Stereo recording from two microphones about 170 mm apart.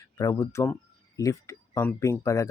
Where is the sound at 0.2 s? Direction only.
20° left (ahead or behind).